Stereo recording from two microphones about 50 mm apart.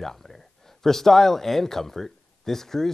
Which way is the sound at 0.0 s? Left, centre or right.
Centre.